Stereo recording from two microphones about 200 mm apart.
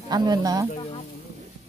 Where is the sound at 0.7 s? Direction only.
30° left (ahead or behind).